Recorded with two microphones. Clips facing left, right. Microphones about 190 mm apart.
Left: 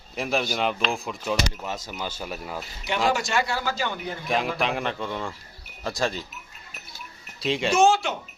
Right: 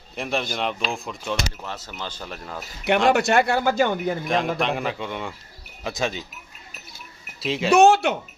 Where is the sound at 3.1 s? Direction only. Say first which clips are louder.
Right 7 dB; 60° right (ahead or behind).